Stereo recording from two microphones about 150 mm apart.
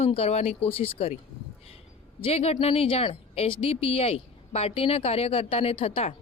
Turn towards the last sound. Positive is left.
turn(degrees=40)  # may be behind; listen again after turning